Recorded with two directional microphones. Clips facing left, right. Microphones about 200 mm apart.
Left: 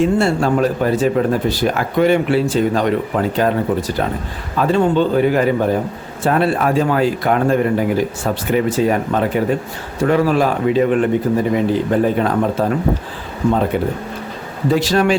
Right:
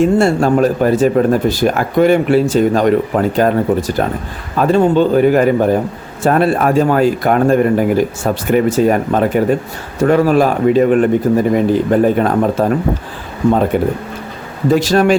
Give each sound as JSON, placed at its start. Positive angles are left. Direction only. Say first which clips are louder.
{"t": 0.0, "sound": "speech", "louder": "right 4 dB", "side_deg": -45}
{"t": 13.7, "sound": "speech", "louder": "right 4 dB", "side_deg": -50}